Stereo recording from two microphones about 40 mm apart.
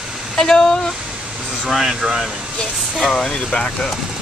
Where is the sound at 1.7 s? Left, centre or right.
Centre.